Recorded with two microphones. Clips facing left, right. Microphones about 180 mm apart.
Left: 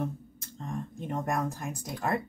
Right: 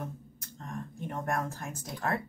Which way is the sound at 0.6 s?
20° left (ahead or behind).